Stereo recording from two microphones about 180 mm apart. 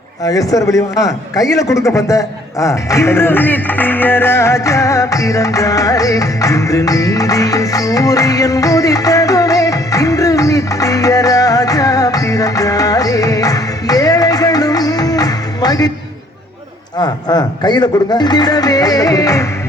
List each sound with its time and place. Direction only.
0.3 s a man's voice: 20° left (ahead or behind)
17.0 s speech: 25° left (ahead or behind)